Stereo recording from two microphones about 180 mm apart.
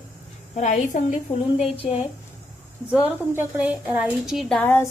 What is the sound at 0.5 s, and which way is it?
Speech, 45° left (ahead or behind).